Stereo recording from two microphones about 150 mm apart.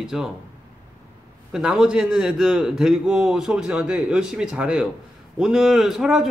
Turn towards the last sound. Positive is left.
turn(degrees=0)  # may be behind; listen again after turning